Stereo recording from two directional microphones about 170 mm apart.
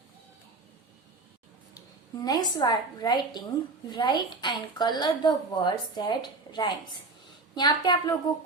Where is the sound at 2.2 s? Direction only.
25° left (ahead or behind).